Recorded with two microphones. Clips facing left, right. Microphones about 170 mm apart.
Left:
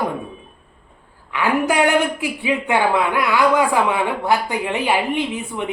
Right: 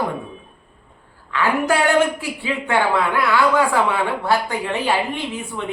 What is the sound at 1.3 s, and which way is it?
Speech, 15° left (ahead or behind).